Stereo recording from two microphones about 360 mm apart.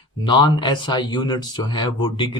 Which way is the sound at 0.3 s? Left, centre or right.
Centre.